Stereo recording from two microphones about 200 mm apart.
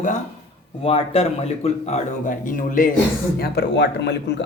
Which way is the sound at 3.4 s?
55° left (ahead or behind).